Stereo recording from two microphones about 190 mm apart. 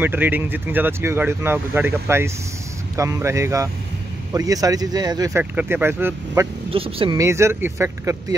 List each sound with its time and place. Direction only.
0.0 s speech: 10° right (ahead or behind)
5.4 s speech: 10° right (ahead or behind)
6.7 s speech: 30° right (ahead or behind)
7.2 s speech: 15° right (ahead or behind)